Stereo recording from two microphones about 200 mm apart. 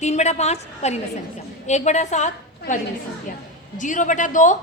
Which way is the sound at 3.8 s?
40° left (ahead or behind).